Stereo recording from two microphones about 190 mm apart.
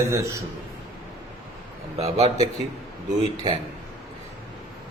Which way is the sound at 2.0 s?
35° right (ahead or behind).